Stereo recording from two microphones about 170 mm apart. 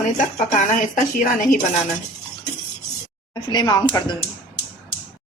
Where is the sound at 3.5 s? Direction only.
25° left (ahead or behind).